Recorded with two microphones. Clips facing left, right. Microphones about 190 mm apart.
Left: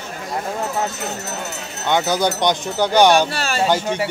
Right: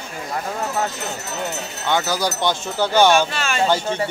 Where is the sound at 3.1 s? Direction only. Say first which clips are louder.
Left 1 dB; 35° left (ahead or behind).